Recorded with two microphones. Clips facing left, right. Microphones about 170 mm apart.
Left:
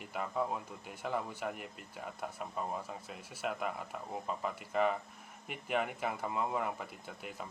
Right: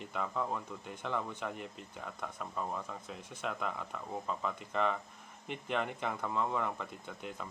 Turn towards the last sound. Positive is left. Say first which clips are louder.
# right 1 dB
turn(degrees=5)  # may be behind; listen again after turning